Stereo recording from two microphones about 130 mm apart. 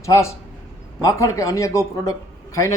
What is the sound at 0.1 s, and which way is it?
Speech, 20° left (ahead or behind).